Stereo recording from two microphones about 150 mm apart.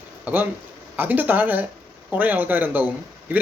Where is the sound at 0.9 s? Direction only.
10° right (ahead or behind).